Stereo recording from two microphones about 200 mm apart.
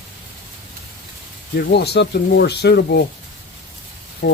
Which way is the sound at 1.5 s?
55° left (ahead or behind).